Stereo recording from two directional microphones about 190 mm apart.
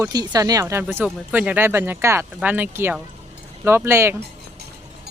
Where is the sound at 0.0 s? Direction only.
20° right (ahead or behind).